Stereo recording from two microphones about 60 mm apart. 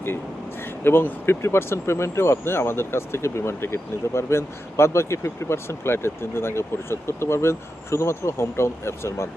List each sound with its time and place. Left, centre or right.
0.9 s speech: left